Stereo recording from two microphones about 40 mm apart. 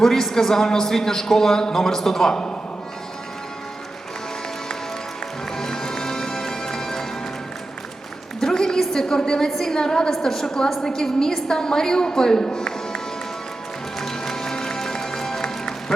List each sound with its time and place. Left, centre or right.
0.0 s a man's voice: centre
5.5 s music: centre
8.4 s a sound: centre
8.8 s a woman's voice: centre
14.0 s music: centre